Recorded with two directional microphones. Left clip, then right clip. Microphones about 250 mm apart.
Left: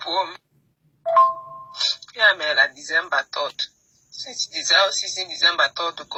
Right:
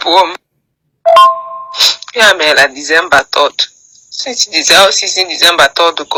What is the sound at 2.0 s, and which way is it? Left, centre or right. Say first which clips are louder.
Speech: right 8 dB; right.